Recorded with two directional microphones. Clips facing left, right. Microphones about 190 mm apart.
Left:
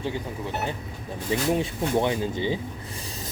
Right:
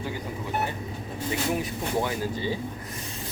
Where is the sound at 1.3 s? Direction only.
25° left (ahead or behind).